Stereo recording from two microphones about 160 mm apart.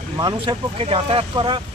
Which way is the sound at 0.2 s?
30° right (ahead or behind).